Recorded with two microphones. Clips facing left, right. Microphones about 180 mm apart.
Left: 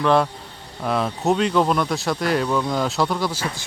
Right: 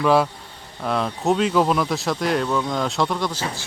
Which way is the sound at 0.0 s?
5° right (ahead or behind).